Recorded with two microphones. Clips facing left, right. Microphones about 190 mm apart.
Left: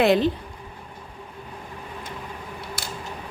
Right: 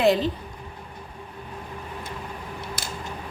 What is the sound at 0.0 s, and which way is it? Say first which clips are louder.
Speech: left 2 dB; 65° left (ahead or behind).